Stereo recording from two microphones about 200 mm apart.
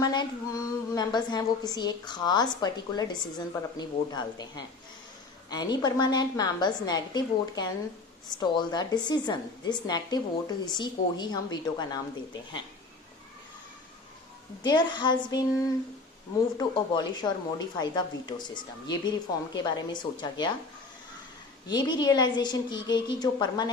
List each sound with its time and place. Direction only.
0.0 s a woman's voice: 20° left (ahead or behind)
14.6 s a woman's voice: 20° left (ahead or behind)
21.7 s a woman's voice: 20° left (ahead or behind)